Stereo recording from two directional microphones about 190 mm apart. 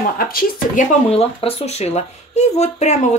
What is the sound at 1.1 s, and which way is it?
Speech, 35° left (ahead or behind).